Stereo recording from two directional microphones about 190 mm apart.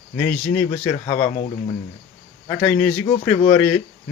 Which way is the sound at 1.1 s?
35° left (ahead or behind).